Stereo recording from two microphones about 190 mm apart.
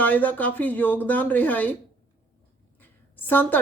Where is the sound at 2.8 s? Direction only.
10° left (ahead or behind).